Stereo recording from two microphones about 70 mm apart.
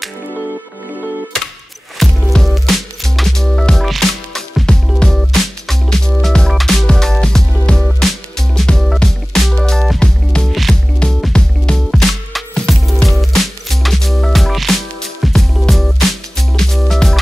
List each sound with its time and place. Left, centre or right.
2.0 s music: centre
11.0 s music: centre
11.9 s music: centre